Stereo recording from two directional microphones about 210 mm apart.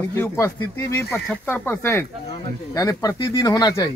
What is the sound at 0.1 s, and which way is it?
Speech, 10° left (ahead or behind).